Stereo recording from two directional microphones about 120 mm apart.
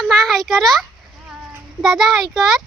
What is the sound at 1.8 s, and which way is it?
Speech, 5° right (ahead or behind).